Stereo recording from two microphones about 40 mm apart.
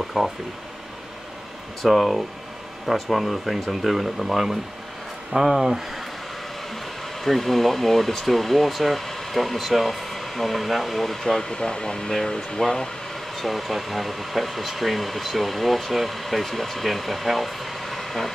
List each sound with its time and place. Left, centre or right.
0.2 s speech: centre
1.8 s speech: centre
7.2 s speech: centre
11.4 s speech: left
13.4 s speech: centre